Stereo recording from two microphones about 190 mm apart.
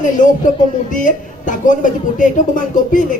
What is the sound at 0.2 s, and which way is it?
Speech, 40° left (ahead or behind).